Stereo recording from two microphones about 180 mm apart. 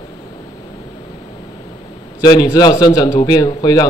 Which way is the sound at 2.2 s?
20° left (ahead or behind).